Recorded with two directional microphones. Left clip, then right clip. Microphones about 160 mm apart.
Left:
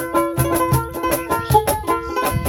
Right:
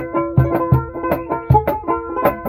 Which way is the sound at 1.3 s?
45° left (ahead or behind).